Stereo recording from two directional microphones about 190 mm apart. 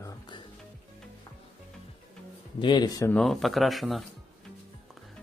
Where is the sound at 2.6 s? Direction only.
25° left (ahead or behind).